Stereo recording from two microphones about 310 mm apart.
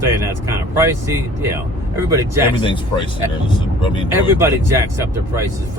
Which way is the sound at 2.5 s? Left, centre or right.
Centre.